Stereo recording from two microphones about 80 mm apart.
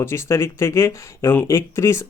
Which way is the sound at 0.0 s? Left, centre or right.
Left.